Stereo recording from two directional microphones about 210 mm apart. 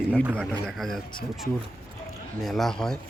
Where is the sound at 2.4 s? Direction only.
Centre (ahead or behind).